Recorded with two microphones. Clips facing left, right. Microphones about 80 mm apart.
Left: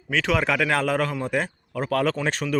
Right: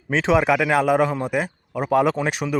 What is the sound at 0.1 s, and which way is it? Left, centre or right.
A man's voice, right.